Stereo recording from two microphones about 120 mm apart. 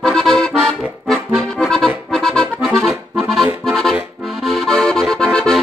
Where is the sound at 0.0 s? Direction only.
5° left (ahead or behind).